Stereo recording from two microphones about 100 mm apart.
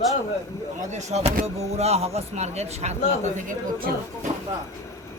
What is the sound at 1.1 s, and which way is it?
A man's voice, 90° right.